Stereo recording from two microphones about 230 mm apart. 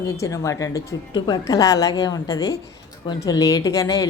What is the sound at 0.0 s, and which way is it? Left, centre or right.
A woman's voice, centre.